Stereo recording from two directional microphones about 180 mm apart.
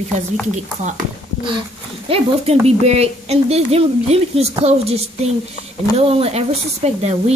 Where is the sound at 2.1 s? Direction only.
30° right (ahead or behind).